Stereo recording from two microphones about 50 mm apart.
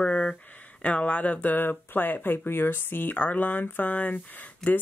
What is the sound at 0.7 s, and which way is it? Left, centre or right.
Speech, left.